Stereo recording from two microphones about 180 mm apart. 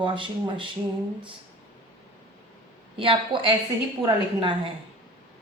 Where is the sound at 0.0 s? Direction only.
25° right (ahead or behind).